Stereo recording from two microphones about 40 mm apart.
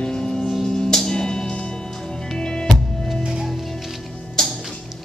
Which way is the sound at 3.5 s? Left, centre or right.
Centre.